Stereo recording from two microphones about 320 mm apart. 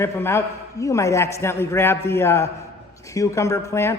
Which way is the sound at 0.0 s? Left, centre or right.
Centre.